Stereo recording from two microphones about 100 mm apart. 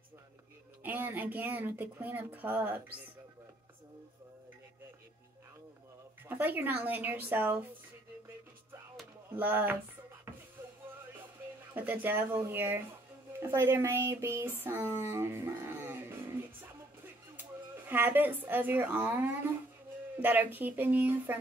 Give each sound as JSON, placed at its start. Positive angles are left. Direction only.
{"t": 0.8, "sound": "speech", "side_deg": -20}
{"t": 6.2, "sound": "speech", "side_deg": -20}
{"t": 9.3, "sound": "speech", "side_deg": -20}
{"t": 11.7, "sound": "speech", "side_deg": -15}
{"t": 17.7, "sound": "speech", "side_deg": -20}